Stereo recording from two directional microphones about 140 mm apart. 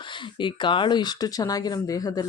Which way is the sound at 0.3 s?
35° left (ahead or behind).